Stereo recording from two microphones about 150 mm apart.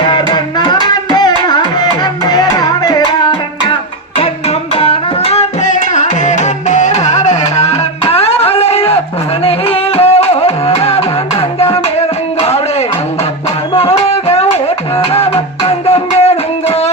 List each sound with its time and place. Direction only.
0.0 s music: 30° left (ahead or behind)
4.8 s tabla: 40° left (ahead or behind)
9.4 s music: 40° left (ahead or behind)
13.7 s music: 40° left (ahead or behind)